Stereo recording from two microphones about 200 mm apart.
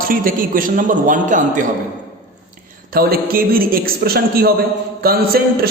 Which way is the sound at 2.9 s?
50° right (ahead or behind).